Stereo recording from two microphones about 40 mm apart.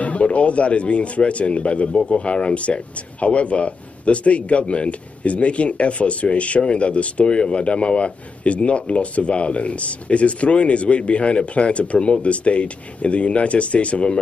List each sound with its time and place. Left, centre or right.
0.0 s speech: left